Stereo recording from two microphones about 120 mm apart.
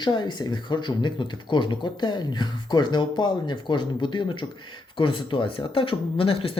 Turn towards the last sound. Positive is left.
turn(degrees=50)  # may be behind; listen again after turning